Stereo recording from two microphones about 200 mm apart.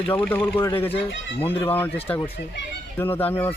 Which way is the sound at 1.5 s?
10° left (ahead or behind).